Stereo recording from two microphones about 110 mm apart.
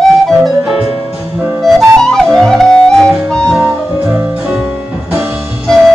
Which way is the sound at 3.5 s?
20° right (ahead or behind).